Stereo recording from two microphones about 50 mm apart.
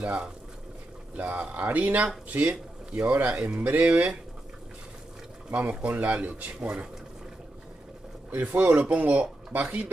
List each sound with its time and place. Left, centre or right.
0.0 s speech: right
5.5 s speech: right
8.3 s speech: right